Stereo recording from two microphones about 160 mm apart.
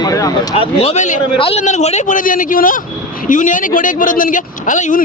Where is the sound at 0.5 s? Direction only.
35° left (ahead or behind); by 5.0 s 50° left (ahead or behind).